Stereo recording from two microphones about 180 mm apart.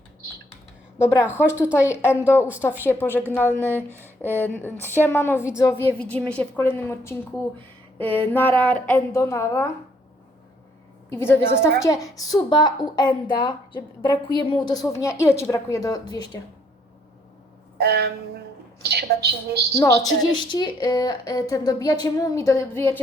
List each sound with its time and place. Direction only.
1.0 s speech: 10° right (ahead or behind)
1.8 s a woman's voice: 15° left (ahead or behind)
11.1 s a woman's voice: 15° left (ahead or behind)
17.7 s a woman's voice: 65° right (ahead or behind)
19.7 s a woman's voice: 15° left (ahead or behind)